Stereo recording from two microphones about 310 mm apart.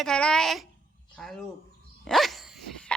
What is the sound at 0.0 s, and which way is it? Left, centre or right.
Speech, centre.